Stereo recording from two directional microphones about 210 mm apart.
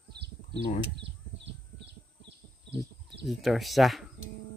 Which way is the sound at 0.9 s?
55° right (ahead or behind).